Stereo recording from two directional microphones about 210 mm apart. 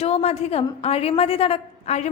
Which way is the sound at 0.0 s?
30° left (ahead or behind).